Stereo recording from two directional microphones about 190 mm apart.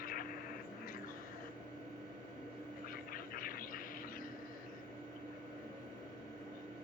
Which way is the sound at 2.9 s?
50° left (ahead or behind).